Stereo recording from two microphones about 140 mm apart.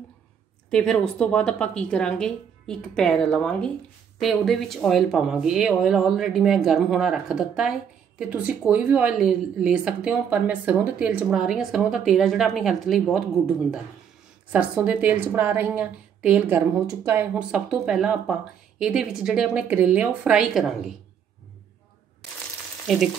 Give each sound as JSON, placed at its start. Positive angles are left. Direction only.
{"t": 0.7, "sound": "speech", "side_deg": 5}
{"t": 14.5, "sound": "speech", "side_deg": -10}
{"t": 22.9, "sound": "speech", "side_deg": 0}